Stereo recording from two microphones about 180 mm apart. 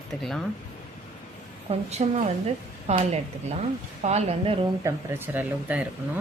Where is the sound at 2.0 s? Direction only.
35° right (ahead or behind).